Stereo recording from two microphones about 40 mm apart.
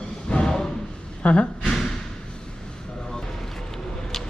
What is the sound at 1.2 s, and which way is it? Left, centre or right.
Speech, left.